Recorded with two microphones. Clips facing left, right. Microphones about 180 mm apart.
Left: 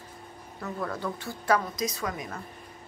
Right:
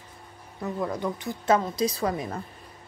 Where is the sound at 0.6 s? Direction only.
20° right (ahead or behind).